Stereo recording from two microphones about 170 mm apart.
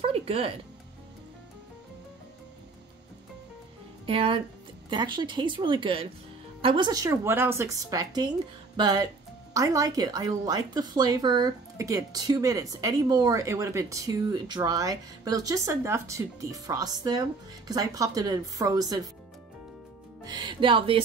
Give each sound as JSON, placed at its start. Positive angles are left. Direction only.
{"t": 0.0, "sound": "music", "side_deg": -35}
{"t": 4.0, "sound": "a woman's voice", "side_deg": -30}
{"t": 20.2, "sound": "speech", "side_deg": -25}